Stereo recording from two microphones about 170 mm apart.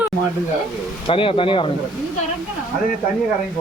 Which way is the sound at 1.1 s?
30° left (ahead or behind).